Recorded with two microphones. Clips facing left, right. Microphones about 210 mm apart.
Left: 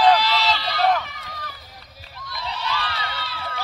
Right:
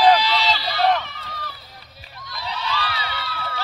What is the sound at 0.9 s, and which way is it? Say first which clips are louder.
Run: even; 10° left (ahead or behind).